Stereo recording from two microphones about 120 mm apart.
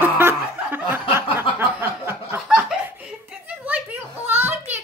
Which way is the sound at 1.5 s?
20° right (ahead or behind).